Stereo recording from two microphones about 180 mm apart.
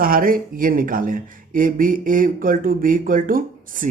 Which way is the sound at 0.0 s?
55° right (ahead or behind).